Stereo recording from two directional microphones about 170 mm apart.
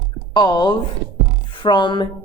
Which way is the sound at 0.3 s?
25° left (ahead or behind).